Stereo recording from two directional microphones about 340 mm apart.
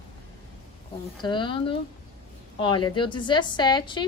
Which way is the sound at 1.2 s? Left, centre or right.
Centre.